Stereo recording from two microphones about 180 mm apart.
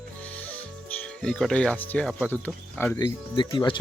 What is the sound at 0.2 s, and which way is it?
Speech, 10° left (ahead or behind).